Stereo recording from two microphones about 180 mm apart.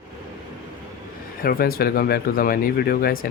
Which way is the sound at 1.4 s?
55° left (ahead or behind).